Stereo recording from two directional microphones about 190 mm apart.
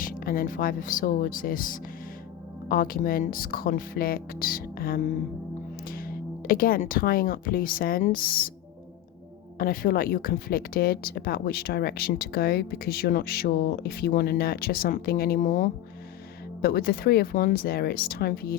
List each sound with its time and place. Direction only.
0.0 s speech: 50° left (ahead or behind)
9.6 s speech: 50° left (ahead or behind)